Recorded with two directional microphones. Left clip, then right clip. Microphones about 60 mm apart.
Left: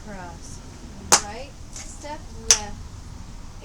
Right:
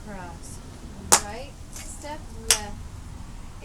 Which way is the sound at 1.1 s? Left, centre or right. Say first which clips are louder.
Left 2 dB; centre.